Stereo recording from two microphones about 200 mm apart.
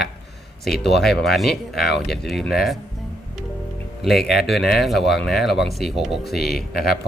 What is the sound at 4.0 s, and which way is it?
Speech, centre (ahead or behind).